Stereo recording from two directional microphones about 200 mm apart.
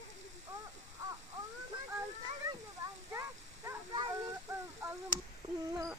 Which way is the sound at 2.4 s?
15° right (ahead or behind).